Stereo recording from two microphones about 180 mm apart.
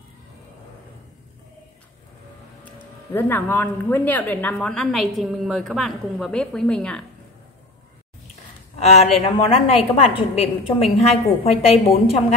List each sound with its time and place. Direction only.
2.6 s speech: 10° left (ahead or behind)
8.7 s a woman's voice: 35° left (ahead or behind)